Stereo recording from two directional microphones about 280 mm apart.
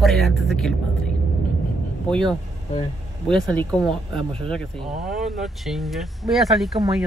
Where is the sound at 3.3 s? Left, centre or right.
Centre.